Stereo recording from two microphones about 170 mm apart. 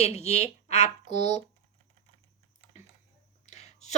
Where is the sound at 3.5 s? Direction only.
40° left (ahead or behind).